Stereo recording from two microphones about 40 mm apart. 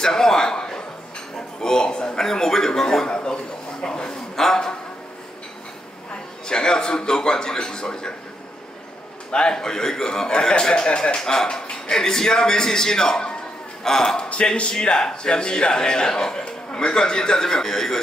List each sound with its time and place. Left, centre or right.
0.0 s a sound: centre
6.4 s a man's voice: centre
9.3 s a man's voice: left
9.6 s a man's voice: centre
14.3 s a man's voice: left; by 18.0 s centre